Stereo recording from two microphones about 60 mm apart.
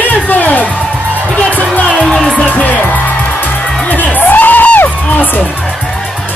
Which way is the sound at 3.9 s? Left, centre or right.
Left.